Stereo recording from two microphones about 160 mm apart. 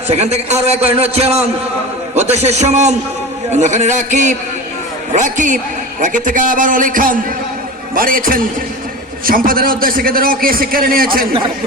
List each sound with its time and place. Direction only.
0.1 s a man's voice: 40° right (ahead or behind); by 11.3 s 65° right (ahead or behind)